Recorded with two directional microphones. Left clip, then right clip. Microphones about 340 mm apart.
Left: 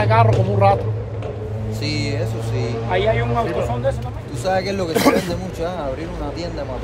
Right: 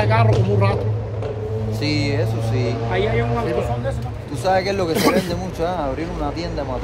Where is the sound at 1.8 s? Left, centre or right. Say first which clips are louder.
Right 2 dB; right.